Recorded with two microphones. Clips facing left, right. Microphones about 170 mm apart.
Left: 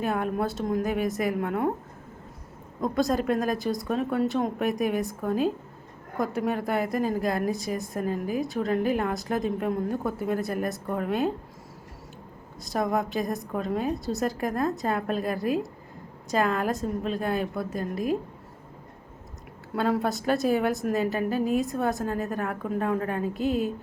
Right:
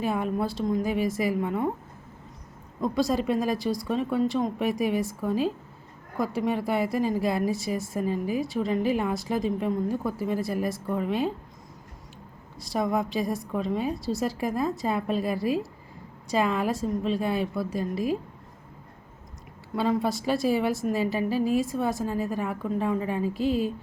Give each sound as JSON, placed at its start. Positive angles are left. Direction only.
{"t": 0.0, "sound": "a woman's voice", "side_deg": 0}
{"t": 2.8, "sound": "a woman's voice", "side_deg": 0}
{"t": 6.1, "sound": "a woman's voice", "side_deg": 0}
{"t": 12.6, "sound": "a woman's voice", "side_deg": 0}
{"t": 15.4, "sound": "a woman's voice", "side_deg": 50}
{"t": 16.3, "sound": "a woman's voice", "side_deg": 0}
{"t": 17.9, "sound": "a woman's voice", "side_deg": 50}
{"t": 19.7, "sound": "a woman's voice", "side_deg": 0}
{"t": 21.2, "sound": "a woman's voice", "side_deg": 50}
{"t": 21.6, "sound": "a woman's voice", "side_deg": 0}